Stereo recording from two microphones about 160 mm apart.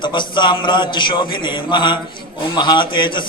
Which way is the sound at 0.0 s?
30° left (ahead or behind).